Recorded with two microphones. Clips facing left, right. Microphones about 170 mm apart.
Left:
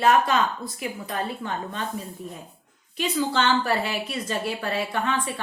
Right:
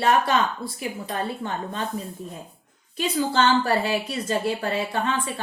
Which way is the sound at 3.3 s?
35° right (ahead or behind).